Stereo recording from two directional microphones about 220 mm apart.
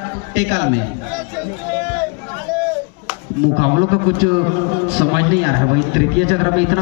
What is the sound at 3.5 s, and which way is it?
A man's voice, 50° right (ahead or behind).